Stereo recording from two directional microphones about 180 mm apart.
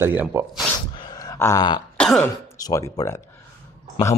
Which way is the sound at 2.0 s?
5° left (ahead or behind).